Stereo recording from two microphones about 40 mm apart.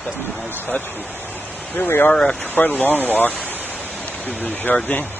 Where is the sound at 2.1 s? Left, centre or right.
Left.